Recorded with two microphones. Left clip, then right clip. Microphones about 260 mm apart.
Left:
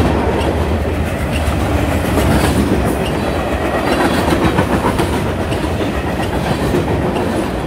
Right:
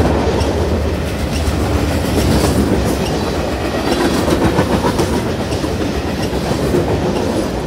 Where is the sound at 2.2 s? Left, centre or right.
Centre.